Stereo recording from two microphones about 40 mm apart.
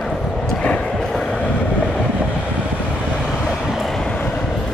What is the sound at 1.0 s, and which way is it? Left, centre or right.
Train, centre.